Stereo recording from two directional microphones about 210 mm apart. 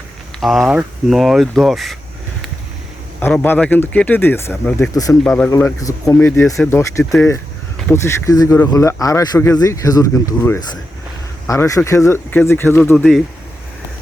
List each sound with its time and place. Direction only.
0.3 s speech: centre (ahead or behind)
3.2 s speech: 10° left (ahead or behind)